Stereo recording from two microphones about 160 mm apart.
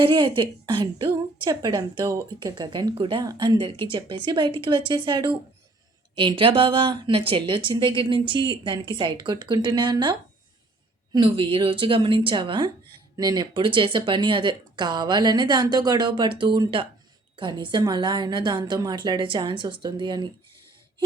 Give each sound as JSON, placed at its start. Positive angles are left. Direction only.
{"t": 0.0, "sound": "speech", "side_deg": -30}